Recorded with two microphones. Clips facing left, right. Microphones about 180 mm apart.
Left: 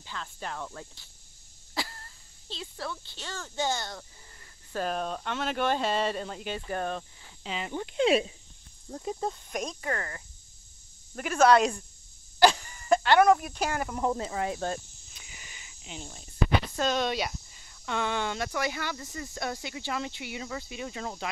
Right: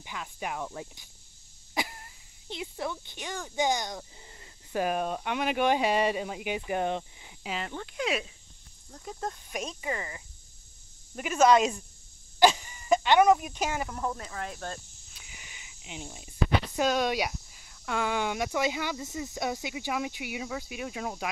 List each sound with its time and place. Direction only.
0.0 s speech: 10° right (ahead or behind)
7.7 s speech: 25° left (ahead or behind)
9.2 s speech: centre (ahead or behind)
12.4 s a sound: 10° right (ahead or behind)
14.0 s speech: 20° left (ahead or behind)
15.1 s a sound: 5° right (ahead or behind)
16.7 s speech: 10° right (ahead or behind)